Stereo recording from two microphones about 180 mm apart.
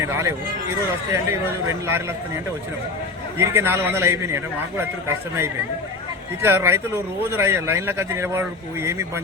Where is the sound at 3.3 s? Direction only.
15° right (ahead or behind).